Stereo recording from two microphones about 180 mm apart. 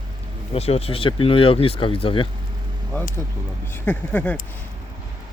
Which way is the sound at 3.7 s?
10° left (ahead or behind).